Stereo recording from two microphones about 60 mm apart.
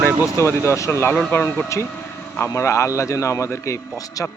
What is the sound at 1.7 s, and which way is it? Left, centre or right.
A man's voice, left.